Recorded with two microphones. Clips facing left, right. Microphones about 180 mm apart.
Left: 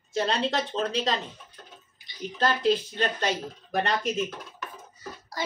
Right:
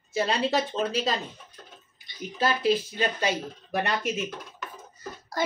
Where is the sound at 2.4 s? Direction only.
5° right (ahead or behind).